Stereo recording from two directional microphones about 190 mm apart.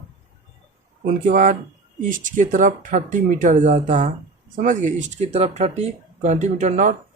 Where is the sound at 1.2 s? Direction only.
45° right (ahead or behind).